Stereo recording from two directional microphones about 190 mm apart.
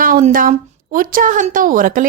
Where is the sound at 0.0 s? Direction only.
45° right (ahead or behind).